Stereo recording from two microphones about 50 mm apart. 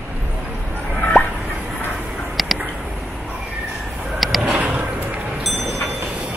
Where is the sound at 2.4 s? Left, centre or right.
Centre.